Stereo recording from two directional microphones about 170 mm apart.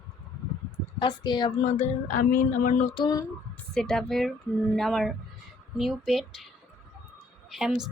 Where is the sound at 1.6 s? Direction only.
40° left (ahead or behind).